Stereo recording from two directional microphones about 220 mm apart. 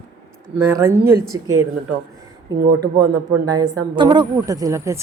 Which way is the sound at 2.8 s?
15° right (ahead or behind).